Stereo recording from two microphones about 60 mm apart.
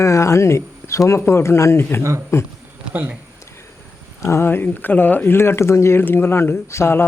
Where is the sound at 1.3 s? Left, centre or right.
Left.